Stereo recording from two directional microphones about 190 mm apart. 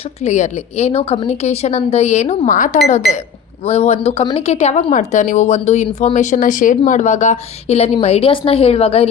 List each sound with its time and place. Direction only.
0.2 s speech: 35° left (ahead or behind)